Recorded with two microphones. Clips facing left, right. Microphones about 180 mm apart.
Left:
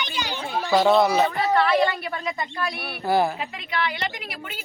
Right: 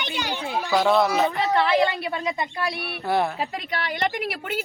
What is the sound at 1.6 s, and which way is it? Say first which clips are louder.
Speech: even; 20° right (ahead or behind).